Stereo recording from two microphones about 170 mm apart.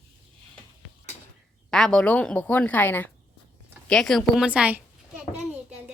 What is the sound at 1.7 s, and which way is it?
A woman's voice, centre (ahead or behind).